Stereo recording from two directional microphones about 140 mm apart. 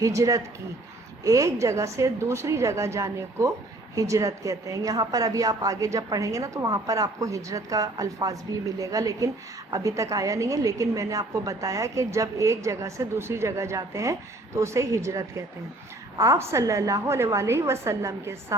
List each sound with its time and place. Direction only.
0.0 s a woman's voice: 25° right (ahead or behind)